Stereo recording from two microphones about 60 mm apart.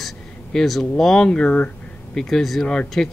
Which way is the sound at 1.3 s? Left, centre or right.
Centre.